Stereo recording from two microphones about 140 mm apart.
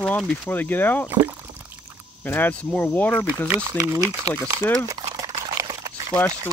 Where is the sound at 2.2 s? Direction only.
15° left (ahead or behind).